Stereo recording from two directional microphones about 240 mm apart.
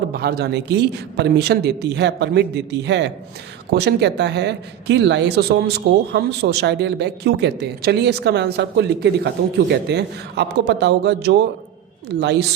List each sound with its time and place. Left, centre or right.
0.1 s speech: right